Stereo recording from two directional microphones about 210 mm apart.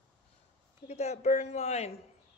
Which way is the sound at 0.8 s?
30° left (ahead or behind).